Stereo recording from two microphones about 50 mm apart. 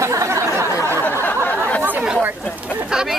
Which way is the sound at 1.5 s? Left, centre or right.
Left.